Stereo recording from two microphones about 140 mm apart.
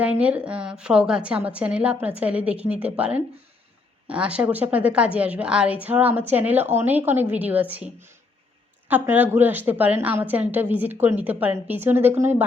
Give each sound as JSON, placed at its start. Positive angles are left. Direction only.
{"t": 0.0, "sound": "a woman's voice", "side_deg": -10}
{"t": 8.9, "sound": "a woman's voice", "side_deg": -10}